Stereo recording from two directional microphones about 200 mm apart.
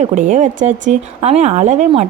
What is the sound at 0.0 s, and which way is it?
A woman's voice, 35° right (ahead or behind).